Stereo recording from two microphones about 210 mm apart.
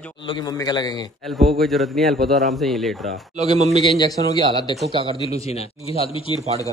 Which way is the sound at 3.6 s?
30° right (ahead or behind).